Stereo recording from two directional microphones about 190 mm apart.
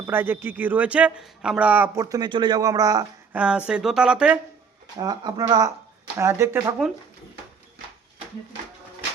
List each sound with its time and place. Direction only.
0.0 s speech: 10° right (ahead or behind)
3.3 s speech: 5° right (ahead or behind)
4.9 s speech: 20° right (ahead or behind)